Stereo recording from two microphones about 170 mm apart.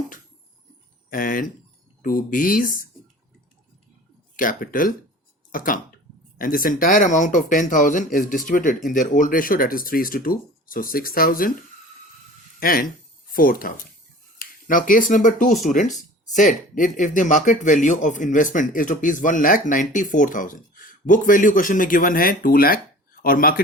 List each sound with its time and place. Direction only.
1.1 s speech: 55° left (ahead or behind)
4.4 s speech: 55° left (ahead or behind)
12.5 s speech: 55° left (ahead or behind)